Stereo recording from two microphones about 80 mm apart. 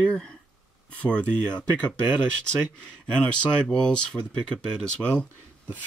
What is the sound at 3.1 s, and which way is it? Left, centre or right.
Speech, centre.